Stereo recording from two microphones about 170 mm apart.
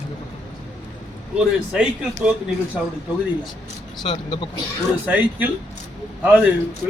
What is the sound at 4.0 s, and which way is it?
Speech, 30° left (ahead or behind).